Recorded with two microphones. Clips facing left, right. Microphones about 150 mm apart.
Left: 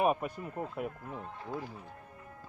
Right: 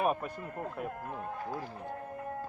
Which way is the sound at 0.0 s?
10° left (ahead or behind).